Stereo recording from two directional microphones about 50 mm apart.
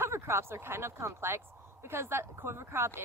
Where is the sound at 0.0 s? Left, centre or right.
Right.